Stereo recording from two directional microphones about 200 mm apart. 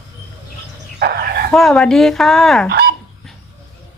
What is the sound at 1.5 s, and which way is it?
A woman's voice, centre (ahead or behind).